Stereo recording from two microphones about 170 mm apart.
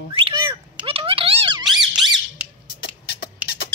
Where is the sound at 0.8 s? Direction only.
35° right (ahead or behind).